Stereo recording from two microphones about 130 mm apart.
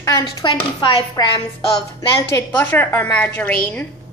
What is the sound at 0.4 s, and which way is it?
Chopping, 40° left (ahead or behind).